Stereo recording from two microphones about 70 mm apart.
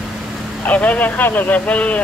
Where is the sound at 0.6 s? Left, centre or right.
Left.